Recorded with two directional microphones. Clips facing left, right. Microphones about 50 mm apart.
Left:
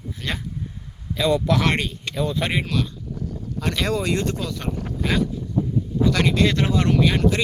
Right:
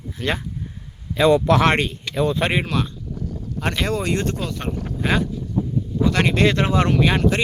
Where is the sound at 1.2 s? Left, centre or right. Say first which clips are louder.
Right 5 dB; right.